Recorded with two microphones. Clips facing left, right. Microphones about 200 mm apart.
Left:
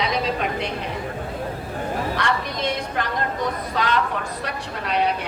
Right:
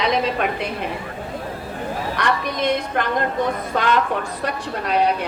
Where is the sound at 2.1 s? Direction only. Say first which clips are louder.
Right 2 dB; 55° right (ahead or behind).